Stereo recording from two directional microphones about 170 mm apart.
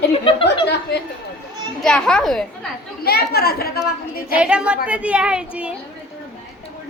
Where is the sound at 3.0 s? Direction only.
65° left (ahead or behind).